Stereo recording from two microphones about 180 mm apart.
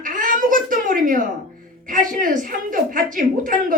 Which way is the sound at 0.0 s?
50° right (ahead or behind).